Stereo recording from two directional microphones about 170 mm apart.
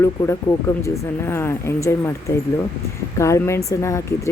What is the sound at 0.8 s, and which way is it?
Speech, 15° left (ahead or behind).